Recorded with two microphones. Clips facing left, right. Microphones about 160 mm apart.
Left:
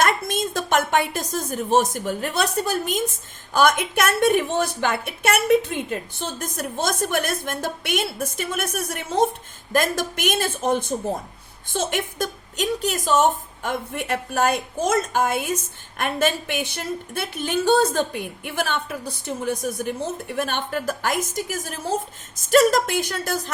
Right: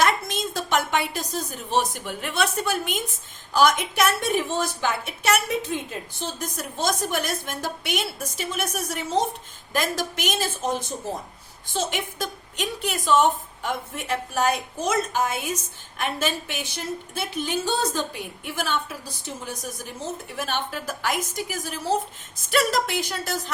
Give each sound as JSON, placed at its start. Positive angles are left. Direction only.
{"t": 0.0, "sound": "a woman's voice", "side_deg": 50}
{"t": 3.5, "sound": "a woman's voice", "side_deg": 55}